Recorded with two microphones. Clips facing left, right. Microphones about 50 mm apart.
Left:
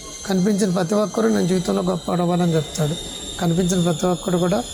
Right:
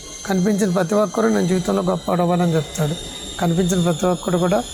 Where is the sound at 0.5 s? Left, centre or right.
Right.